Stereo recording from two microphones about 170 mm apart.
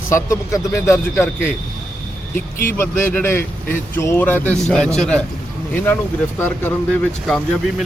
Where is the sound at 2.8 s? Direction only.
15° left (ahead or behind).